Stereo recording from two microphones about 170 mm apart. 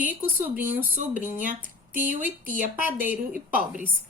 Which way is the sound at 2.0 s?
50° right (ahead or behind).